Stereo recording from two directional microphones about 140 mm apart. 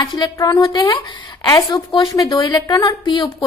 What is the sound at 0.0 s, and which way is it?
A woman's voice, 30° left (ahead or behind).